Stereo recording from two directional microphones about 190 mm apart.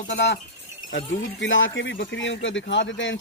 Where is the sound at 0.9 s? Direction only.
80° left.